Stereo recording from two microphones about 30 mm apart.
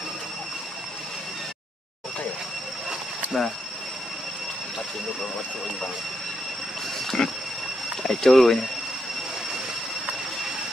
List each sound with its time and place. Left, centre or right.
3.3 s speech: centre
7.2 s train: left
8.0 s speech: centre